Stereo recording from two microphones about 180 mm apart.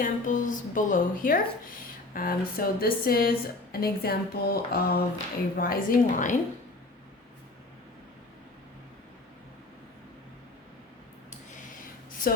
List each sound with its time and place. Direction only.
0.0 s a woman's voice: 45° left (ahead or behind)